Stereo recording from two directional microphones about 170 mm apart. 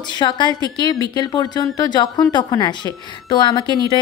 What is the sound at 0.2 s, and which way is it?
A woman's voice, 25° left (ahead or behind).